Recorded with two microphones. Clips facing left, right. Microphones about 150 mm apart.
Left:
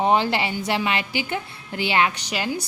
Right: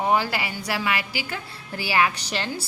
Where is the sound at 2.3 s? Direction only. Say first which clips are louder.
Left 3 dB; 10° left (ahead or behind).